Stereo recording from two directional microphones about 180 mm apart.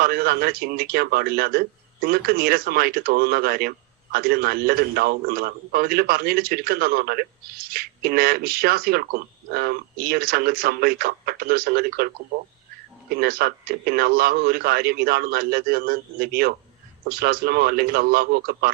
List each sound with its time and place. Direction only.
0.0 s a man's voice: 55° right (ahead or behind)